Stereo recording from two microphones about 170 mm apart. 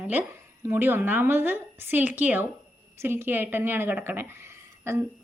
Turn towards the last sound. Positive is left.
turn(degrees=-15)  # may be behind; listen again after turning